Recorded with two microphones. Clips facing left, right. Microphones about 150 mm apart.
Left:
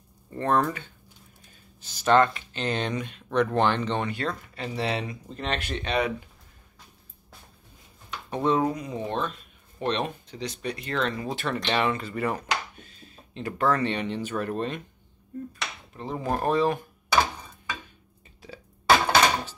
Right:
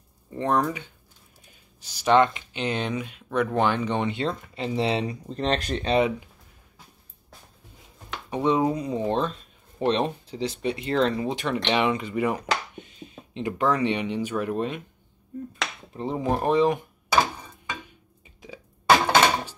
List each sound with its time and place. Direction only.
0.3 s speech: 15° right (ahead or behind)
4.1 s speech: 25° right (ahead or behind)
8.3 s speech: 10° right (ahead or behind)
8.7 s speech: 30° right (ahead or behind)
11.2 s speech: 15° right (ahead or behind)
16.0 s speech: 25° right (ahead or behind)
18.4 s music: 15° right (ahead or behind)